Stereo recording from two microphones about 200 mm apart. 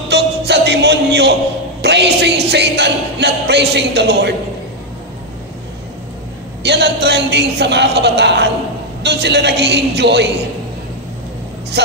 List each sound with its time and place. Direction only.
0.1 s music: 55° right (ahead or behind)
1.8 s a sound: 55° right (ahead or behind)
2.5 s a man's voice: 55° right (ahead or behind)
6.6 s a man's voice: 55° right (ahead or behind)
11.7 s speech: 55° right (ahead or behind)